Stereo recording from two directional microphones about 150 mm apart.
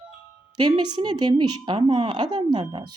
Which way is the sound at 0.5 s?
30° right (ahead or behind).